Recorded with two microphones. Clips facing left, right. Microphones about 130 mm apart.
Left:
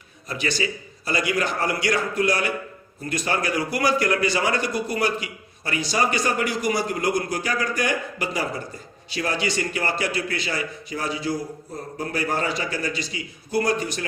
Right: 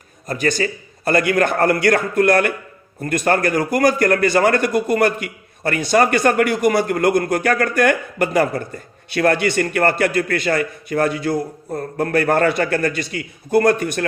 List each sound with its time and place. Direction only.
0.3 s a man's voice: 50° right (ahead or behind)